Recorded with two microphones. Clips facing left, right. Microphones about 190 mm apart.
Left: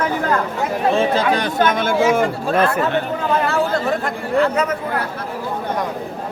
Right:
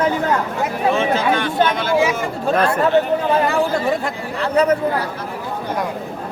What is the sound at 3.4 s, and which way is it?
Chatter, 15° right (ahead or behind).